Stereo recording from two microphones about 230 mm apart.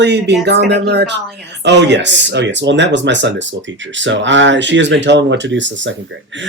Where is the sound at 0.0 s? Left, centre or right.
Right.